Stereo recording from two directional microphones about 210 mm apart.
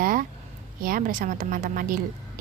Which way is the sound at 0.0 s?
40° right (ahead or behind).